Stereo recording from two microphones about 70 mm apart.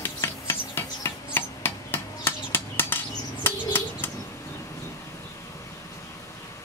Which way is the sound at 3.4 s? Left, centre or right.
Left.